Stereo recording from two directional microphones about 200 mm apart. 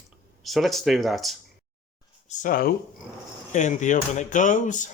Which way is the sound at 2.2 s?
40° left (ahead or behind).